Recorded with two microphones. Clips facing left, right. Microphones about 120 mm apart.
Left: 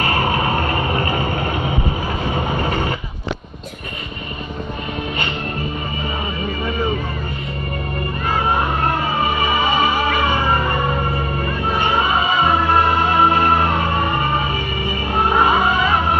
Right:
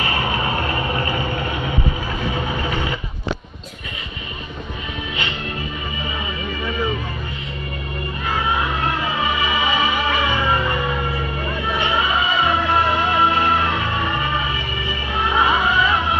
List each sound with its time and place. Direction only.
0.0 s music: 45° left (ahead or behind)
2.3 s vehicle: 45° left (ahead or behind)
8.3 s music: 45° left (ahead or behind)